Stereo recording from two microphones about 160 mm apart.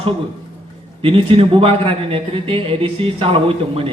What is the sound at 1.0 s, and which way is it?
A man's voice, 35° right (ahead or behind).